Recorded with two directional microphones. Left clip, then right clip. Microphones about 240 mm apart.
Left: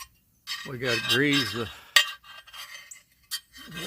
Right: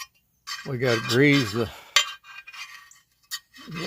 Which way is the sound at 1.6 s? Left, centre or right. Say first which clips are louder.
Right 5 dB; right.